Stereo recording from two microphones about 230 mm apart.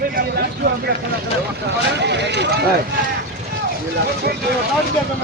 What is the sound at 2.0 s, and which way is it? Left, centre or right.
Vehicle, right.